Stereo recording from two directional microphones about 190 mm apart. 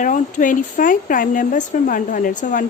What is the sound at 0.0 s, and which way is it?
A woman's voice, 45° left (ahead or behind).